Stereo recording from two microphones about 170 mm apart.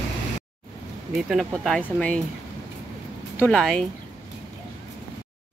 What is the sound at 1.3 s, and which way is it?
Speech, centre (ahead or behind).